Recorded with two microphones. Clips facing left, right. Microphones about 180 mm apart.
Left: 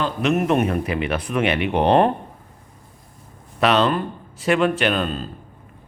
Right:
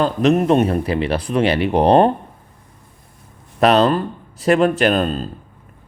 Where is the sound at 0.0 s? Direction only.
40° right (ahead or behind).